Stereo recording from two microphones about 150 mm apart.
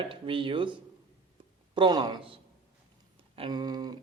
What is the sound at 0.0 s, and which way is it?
A man's voice, 35° right (ahead or behind).